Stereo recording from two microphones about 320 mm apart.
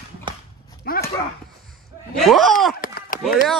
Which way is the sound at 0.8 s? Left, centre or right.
Left.